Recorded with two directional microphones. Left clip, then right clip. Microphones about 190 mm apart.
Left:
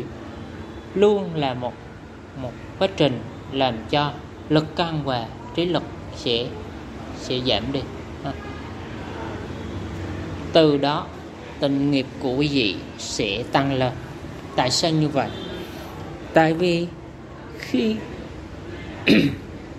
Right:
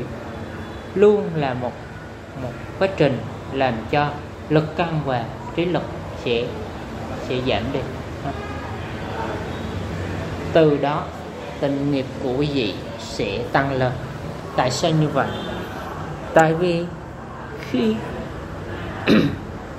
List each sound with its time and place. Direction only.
0.9 s speech: 30° left (ahead or behind)
3.5 s a man's voice: 35° left (ahead or behind)
10.5 s speech: 40° left (ahead or behind)
16.3 s a woman's voice: 40° left (ahead or behind)
19.0 s speech: 35° left (ahead or behind)